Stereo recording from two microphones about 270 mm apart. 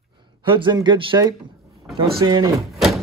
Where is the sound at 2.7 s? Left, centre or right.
Centre.